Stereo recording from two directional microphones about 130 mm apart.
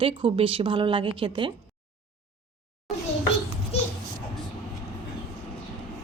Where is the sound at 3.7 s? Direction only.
50° left (ahead or behind).